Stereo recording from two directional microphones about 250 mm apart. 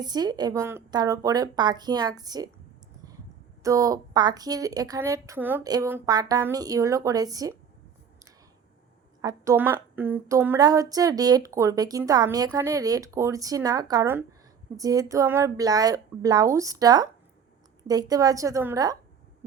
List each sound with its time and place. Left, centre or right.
0.0 s speech: centre
3.6 s speech: centre
9.2 s speech: centre